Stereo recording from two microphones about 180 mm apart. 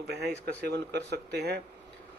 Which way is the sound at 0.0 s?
65° right (ahead or behind).